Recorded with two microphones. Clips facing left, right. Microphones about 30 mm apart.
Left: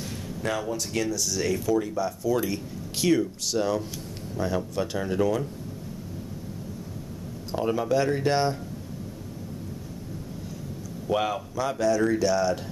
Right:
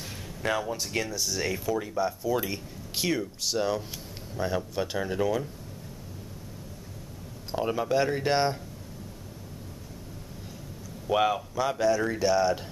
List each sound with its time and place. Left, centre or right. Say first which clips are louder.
0.4 s speech: even; centre
7.5 s speech: left 2 dB; centre
11.1 s speech: right 1 dB; centre